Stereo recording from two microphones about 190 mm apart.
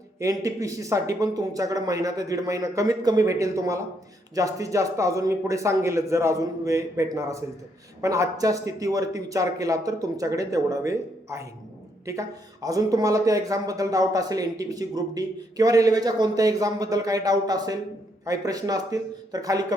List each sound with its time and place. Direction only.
0.2 s speech: 15° right (ahead or behind)